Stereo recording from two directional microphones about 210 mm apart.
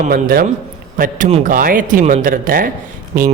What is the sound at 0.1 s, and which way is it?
Speech, 45° right (ahead or behind).